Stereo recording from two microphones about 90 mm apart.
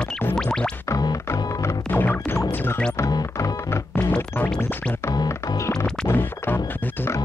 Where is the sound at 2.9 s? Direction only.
40° left (ahead or behind).